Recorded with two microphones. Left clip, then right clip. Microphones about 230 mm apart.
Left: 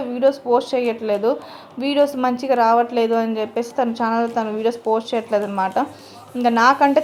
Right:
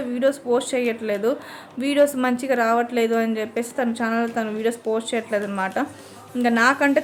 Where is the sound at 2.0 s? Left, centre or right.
Right.